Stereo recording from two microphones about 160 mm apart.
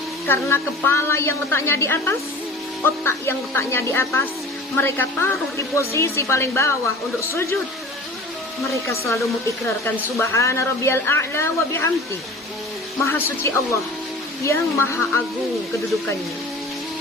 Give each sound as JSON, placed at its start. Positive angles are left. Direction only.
{"t": 0.3, "sound": "a woman's voice", "side_deg": 15}
{"t": 8.7, "sound": "a woman's voice", "side_deg": 20}
{"t": 13.1, "sound": "a woman's voice", "side_deg": 15}